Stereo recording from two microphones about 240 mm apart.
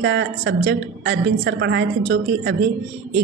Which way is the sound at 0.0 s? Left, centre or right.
Right.